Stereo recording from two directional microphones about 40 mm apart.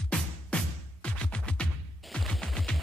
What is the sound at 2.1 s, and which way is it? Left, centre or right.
Machine gun, centre.